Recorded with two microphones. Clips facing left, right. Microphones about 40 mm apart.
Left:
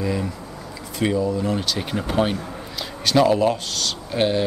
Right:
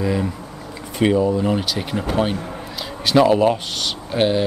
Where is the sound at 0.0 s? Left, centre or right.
Centre.